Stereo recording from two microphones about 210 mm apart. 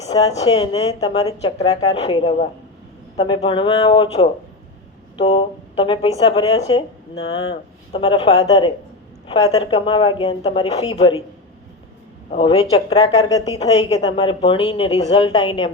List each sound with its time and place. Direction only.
0.1 s a woman's voice: 20° left (ahead or behind)
1.5 s a woman's voice: 30° left (ahead or behind)
5.1 s a sound: 25° left (ahead or behind)
5.7 s a woman's voice: 25° left (ahead or behind)
12.3 s a woman's voice: 25° left (ahead or behind)